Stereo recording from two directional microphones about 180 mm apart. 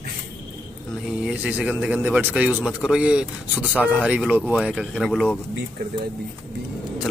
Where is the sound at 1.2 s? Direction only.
5° right (ahead or behind).